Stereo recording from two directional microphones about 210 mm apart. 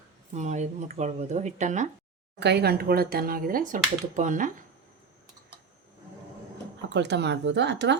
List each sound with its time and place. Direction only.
0.3 s speech: 35° right (ahead or behind)
2.4 s speech: 50° right (ahead or behind)
6.9 s speech: 55° right (ahead or behind)